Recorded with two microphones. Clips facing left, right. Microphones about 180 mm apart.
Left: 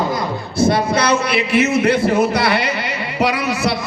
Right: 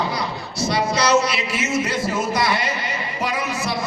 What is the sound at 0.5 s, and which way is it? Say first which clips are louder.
A man's voice: left 6 dB; 55° left (ahead or behind).